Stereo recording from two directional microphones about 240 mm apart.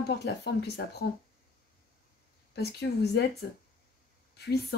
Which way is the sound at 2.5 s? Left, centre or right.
Left.